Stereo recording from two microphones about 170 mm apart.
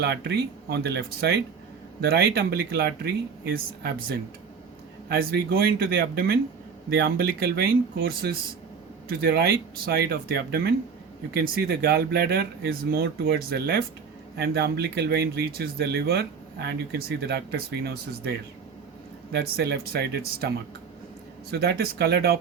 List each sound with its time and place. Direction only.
0.0 s speech: 75° right (ahead or behind)
2.0 s speech: 65° right (ahead or behind)
3.5 s speech: 60° right (ahead or behind)
21.5 s speech: 70° right (ahead or behind)